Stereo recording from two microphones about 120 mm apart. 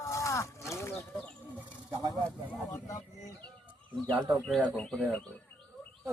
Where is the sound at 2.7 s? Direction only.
25° left (ahead or behind).